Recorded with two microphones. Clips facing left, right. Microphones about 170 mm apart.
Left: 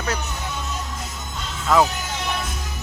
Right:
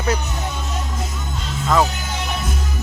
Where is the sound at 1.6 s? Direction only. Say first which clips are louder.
Even; 5° left (ahead or behind).